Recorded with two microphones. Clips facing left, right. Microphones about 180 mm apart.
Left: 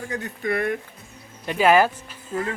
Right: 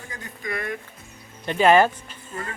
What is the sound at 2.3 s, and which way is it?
Speech, 90° left.